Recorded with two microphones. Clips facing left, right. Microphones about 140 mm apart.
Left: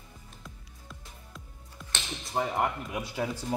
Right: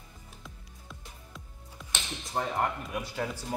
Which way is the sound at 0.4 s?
Centre (ahead or behind).